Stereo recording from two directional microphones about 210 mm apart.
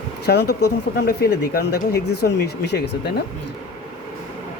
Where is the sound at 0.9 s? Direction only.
50° left (ahead or behind).